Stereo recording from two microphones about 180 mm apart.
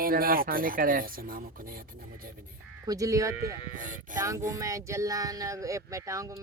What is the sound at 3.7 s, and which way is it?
Speech, 45° right (ahead or behind).